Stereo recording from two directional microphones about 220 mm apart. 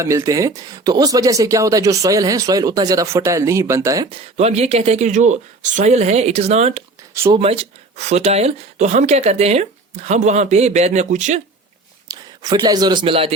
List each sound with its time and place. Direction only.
0.0 s speech: 15° right (ahead or behind); by 6.8 s 30° right (ahead or behind)
7.1 s speech: 15° right (ahead or behind)
7.3 s speech: 30° right (ahead or behind)
12.0 s speech: 20° right (ahead or behind)